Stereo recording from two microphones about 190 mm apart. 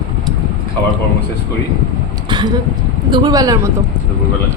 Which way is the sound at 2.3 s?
25° right (ahead or behind).